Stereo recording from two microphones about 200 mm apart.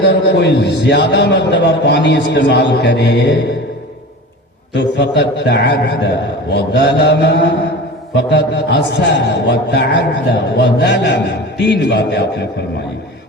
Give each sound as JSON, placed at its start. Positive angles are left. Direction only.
{"t": 0.0, "sound": "a man's voice", "side_deg": 60}
{"t": 4.7, "sound": "a man's voice", "side_deg": 60}